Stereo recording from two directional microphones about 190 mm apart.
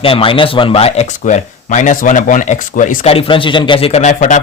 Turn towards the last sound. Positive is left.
turn(degrees=40)  # may be behind; listen again after turning